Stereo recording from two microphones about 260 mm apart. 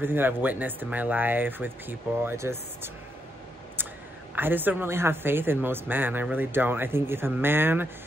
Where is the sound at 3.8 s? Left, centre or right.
Centre.